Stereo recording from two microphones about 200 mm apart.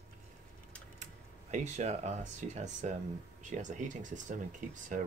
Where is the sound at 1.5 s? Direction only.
35° right (ahead or behind).